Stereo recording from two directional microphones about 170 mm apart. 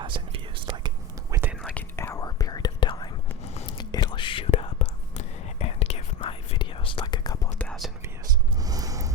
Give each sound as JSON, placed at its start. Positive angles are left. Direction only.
{"t": 0.0, "sound": "whispering", "side_deg": -30}
{"t": 1.4, "sound": "whispering", "side_deg": -10}
{"t": 1.7, "sound": "whispering", "side_deg": 15}
{"t": 3.4, "sound": "a sound", "side_deg": 40}
{"t": 3.7, "sound": "whispering", "side_deg": 25}
{"t": 7.6, "sound": "whispering", "side_deg": 5}
{"t": 8.6, "sound": "a sound", "side_deg": -20}